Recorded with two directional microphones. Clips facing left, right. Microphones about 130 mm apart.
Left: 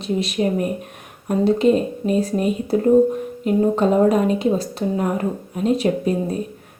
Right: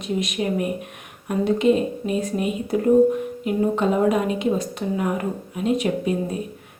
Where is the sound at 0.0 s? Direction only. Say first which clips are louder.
Left 4 dB; 30° left (ahead or behind).